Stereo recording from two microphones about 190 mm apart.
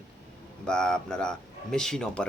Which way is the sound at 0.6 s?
5° left (ahead or behind).